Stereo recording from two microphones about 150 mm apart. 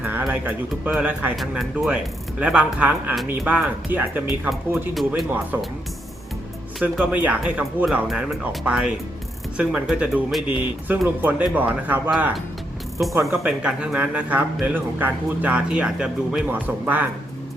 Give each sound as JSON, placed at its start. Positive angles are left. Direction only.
{"t": 0.0, "sound": "speech", "side_deg": -10}
{"t": 6.7, "sound": "speech", "side_deg": -5}
{"t": 13.3, "sound": "speech", "side_deg": -10}